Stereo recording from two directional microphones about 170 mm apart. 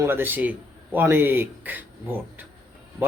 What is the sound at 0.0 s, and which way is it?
A man's voice, 10° right (ahead or behind).